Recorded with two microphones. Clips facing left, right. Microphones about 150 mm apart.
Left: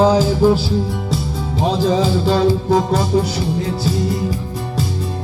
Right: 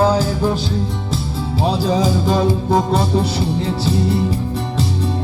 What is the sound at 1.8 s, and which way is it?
Music, 10° right (ahead or behind).